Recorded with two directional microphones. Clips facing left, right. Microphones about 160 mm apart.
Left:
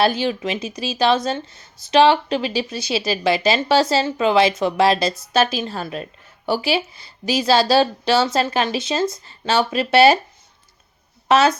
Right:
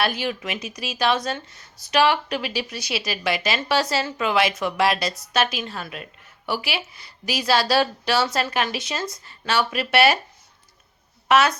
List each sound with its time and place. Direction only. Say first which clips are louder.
0.0 s a woman's voice: left 6 dB; 25° left (ahead or behind)
11.3 s a woman's voice: left 3 dB; 25° left (ahead or behind)